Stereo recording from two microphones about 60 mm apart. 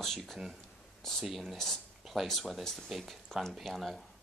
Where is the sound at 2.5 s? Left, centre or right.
Centre.